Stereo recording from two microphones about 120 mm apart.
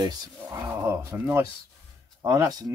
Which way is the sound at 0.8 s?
20° right (ahead or behind).